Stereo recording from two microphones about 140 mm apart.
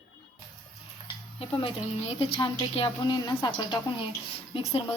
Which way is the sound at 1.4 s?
40° left (ahead or behind).